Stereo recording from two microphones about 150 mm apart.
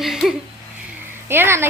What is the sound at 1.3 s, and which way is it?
Speech, 15° right (ahead or behind).